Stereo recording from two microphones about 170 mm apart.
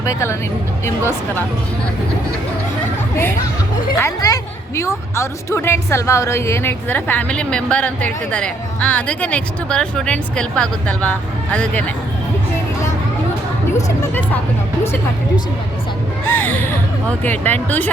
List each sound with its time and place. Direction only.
0.0 s a woman's voice: 15° left (ahead or behind)
3.9 s a woman's voice: 20° left (ahead or behind)
13.8 s speech: 15° left (ahead or behind)
16.2 s a woman's voice: 10° left (ahead or behind)